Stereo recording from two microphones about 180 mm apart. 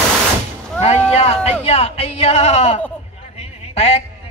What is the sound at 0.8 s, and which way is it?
Speech, 35° left (ahead or behind).